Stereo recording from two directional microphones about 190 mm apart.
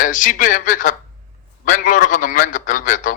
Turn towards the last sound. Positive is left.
turn(degrees=45)  # may be behind; listen again after turning